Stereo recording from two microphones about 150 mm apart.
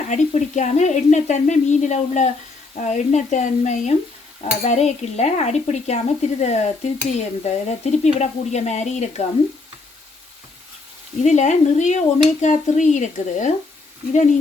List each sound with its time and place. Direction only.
0.1 s speech: 55° left (ahead or behind)
11.2 s speech: 50° left (ahead or behind)